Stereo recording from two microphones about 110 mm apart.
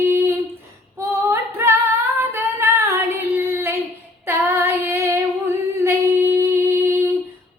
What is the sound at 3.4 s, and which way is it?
Child singing, 20° right (ahead or behind).